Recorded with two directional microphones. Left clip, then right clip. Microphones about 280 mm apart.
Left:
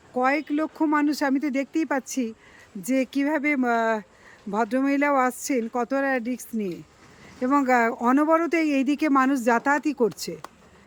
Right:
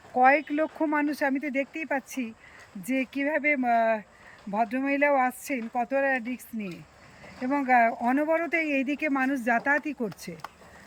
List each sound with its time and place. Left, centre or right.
0.1 s speech: centre
8.4 s speech: left
8.8 s speech: centre